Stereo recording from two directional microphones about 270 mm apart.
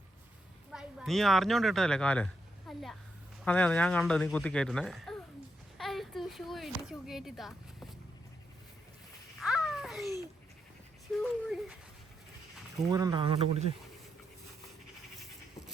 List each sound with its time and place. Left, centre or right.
0.7 s speech: centre
5.7 s a sound: centre
6.8 s speech: centre
9.4 s babbling: centre
11.2 s dog: centre
12.9 s speech: centre